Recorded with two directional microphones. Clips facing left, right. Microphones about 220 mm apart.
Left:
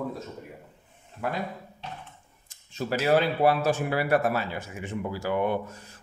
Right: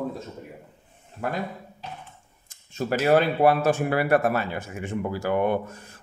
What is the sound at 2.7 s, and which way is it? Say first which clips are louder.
Speech: right 3 dB; 50° right (ahead or behind).